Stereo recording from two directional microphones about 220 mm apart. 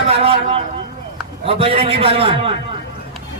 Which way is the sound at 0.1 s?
25° right (ahead or behind).